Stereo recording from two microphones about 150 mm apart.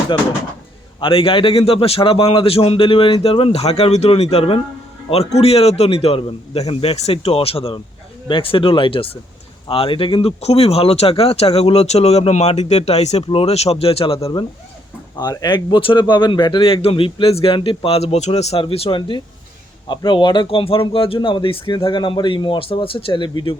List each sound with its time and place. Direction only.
0.9 s a man's voice: 35° left (ahead or behind)
15.2 s a man's voice: 25° left (ahead or behind)